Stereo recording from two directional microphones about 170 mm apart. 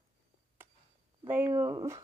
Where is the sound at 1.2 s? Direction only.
10° right (ahead or behind).